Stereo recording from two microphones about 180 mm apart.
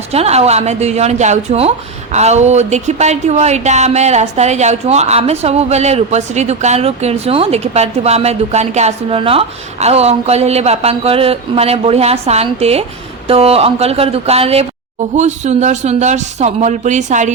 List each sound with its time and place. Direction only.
0.1 s speech: 35° right (ahead or behind)